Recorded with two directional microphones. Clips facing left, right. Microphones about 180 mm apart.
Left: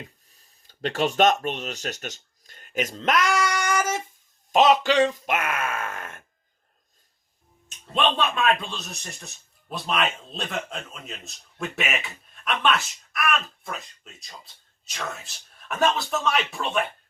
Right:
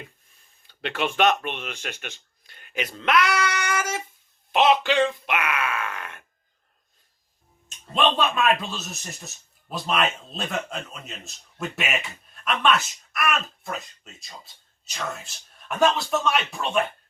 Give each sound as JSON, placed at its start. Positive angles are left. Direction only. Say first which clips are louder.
{"t": 0.3, "sound": "speech", "louder": "left 1 dB", "side_deg": 35}
{"t": 7.9, "sound": "speech", "louder": "right 1 dB", "side_deg": 0}